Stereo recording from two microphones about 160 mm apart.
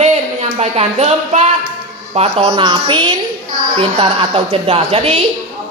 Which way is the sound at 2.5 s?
30° right (ahead or behind).